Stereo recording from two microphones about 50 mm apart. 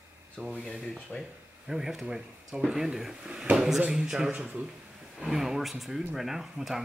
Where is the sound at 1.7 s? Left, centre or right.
Centre.